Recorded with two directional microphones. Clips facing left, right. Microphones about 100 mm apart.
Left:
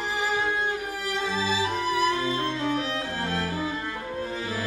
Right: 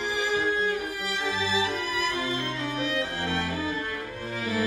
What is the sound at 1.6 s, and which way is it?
Music, 30° left (ahead or behind).